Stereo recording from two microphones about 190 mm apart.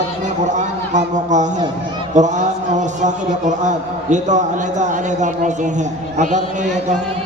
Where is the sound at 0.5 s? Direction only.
40° right (ahead or behind).